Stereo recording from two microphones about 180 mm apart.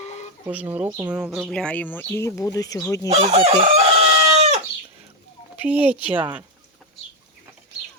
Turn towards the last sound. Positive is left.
turn(degrees=-10)  # may be behind; listen again after turning